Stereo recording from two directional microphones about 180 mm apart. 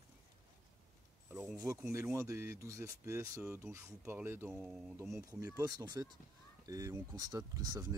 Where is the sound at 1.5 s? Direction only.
15° right (ahead or behind).